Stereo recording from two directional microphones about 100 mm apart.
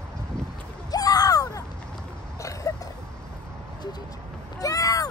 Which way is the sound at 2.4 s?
35° left (ahead or behind).